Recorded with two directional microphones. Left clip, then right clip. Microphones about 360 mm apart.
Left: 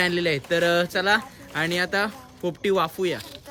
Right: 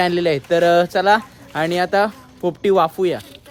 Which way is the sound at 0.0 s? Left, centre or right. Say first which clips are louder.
Right 6 dB; centre.